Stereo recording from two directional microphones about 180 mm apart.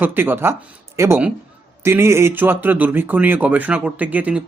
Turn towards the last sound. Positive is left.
turn(degrees=-10)  # may be behind; listen again after turning